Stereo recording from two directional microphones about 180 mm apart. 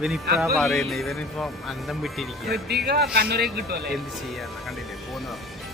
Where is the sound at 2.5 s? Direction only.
65° right (ahead or behind).